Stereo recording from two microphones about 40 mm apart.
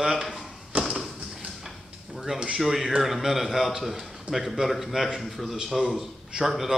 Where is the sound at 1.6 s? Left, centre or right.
Centre.